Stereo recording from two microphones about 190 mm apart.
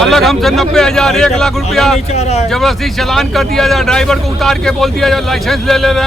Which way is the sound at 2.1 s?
35° left (ahead or behind).